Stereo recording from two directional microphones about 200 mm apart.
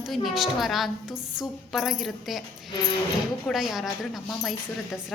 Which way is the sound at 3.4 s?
Centre (ahead or behind).